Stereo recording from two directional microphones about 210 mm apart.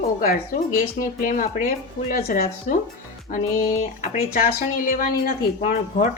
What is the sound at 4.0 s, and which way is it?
Speech, 40° left (ahead or behind).